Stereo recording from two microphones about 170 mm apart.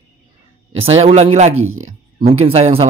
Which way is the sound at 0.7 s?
35° right (ahead or behind).